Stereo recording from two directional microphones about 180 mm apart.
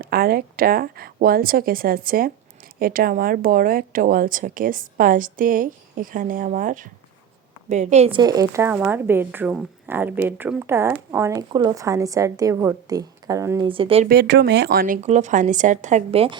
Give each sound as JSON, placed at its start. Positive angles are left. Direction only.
{"t": 0.0, "sound": "speech", "side_deg": -55}
{"t": 8.2, "sound": "speech", "side_deg": -20}
{"t": 13.7, "sound": "speech", "side_deg": -30}
{"t": 14.1, "sound": "speech", "side_deg": -65}
{"t": 15.0, "sound": "speech", "side_deg": -40}